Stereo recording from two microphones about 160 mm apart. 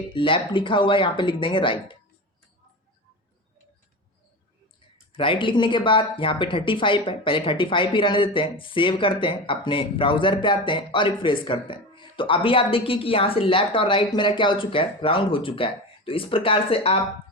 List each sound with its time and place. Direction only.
0.1 s speech: 30° left (ahead or behind)
5.1 s speech: 35° left (ahead or behind)